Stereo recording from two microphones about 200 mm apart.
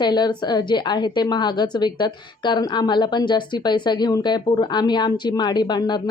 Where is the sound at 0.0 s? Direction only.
20° left (ahead or behind).